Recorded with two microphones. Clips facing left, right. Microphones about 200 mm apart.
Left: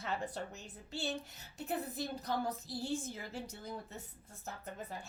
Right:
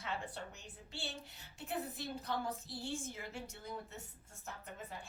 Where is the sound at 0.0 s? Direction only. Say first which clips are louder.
Left 4 dB; 40° left (ahead or behind).